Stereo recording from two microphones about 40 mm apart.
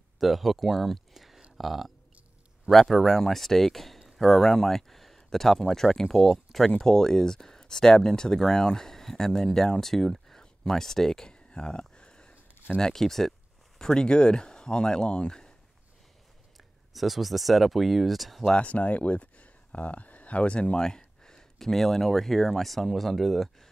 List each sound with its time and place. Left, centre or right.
0.2 s speech: centre
6.8 s speech: centre
11.3 s a sound: left
12.7 s speech: centre
16.9 s speech: centre
18.5 s speech: left; by 23.5 s centre